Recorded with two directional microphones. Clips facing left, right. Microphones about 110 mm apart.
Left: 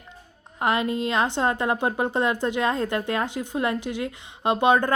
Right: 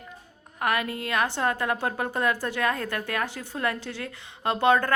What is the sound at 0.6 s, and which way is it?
A woman's voice, 25° left (ahead or behind).